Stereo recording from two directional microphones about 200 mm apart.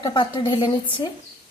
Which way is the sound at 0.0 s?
20° left (ahead or behind).